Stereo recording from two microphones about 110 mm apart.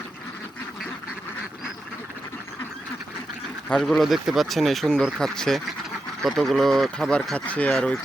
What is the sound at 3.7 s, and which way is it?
Speech, 5° left (ahead or behind).